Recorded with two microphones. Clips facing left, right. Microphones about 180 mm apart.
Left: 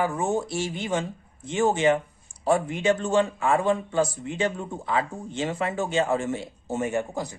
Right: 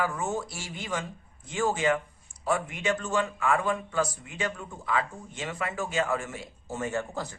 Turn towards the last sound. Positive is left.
turn(degrees=15)  # may be behind; listen again after turning